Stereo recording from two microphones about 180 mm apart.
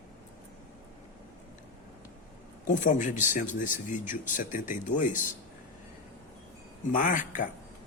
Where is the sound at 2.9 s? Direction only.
45° left (ahead or behind).